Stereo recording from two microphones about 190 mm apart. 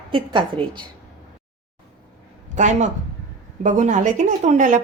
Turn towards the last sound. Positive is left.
turn(degrees=-40)  # may be behind; listen again after turning